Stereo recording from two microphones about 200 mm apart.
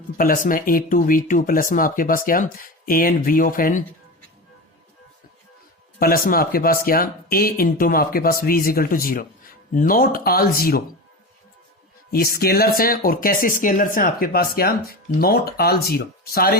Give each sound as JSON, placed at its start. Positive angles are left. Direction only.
{"t": 0.2, "sound": "speech", "side_deg": 45}
{"t": 6.0, "sound": "speech", "side_deg": 45}
{"t": 12.1, "sound": "speech", "side_deg": 50}